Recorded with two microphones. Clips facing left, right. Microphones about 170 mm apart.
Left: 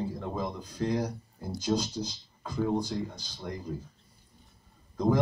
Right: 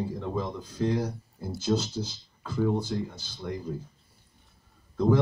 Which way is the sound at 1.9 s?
10° right (ahead or behind).